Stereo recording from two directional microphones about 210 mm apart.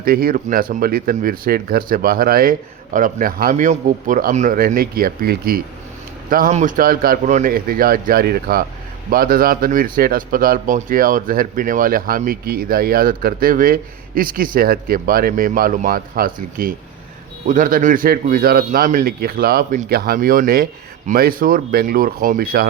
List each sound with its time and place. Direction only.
0.0 s speech: 45° right (ahead or behind)